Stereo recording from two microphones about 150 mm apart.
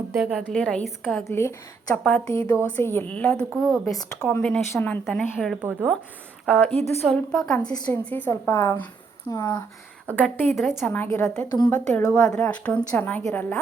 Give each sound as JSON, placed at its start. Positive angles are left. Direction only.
{"t": 0.2, "sound": "a woman's voice", "side_deg": 0}
{"t": 1.2, "sound": "a woman's voice", "side_deg": 20}
{"t": 2.0, "sound": "a woman's voice", "side_deg": 5}
{"t": 5.0, "sound": "a woman's voice", "side_deg": 0}
{"t": 5.5, "sound": "speech", "side_deg": -15}
{"t": 6.4, "sound": "a woman's voice", "side_deg": 10}